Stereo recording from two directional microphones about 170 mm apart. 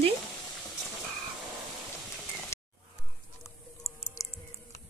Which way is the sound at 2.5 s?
15° left (ahead or behind).